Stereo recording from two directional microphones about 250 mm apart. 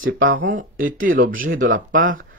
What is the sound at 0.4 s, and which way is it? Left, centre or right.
Speech, right.